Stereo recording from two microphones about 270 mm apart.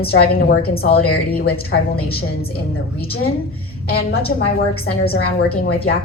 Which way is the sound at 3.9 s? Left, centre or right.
Left.